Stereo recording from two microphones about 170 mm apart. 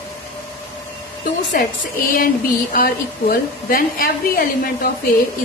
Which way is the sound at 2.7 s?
60° left (ahead or behind).